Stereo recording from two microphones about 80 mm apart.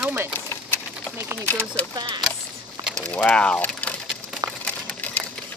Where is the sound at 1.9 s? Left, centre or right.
Right.